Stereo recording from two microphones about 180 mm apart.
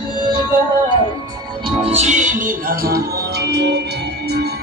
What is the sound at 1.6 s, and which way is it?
Music, 35° right (ahead or behind).